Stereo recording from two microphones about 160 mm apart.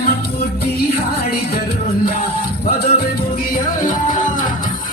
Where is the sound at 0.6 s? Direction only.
75° left (ahead or behind).